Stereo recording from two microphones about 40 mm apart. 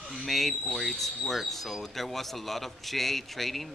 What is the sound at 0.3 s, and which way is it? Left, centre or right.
Speech, centre.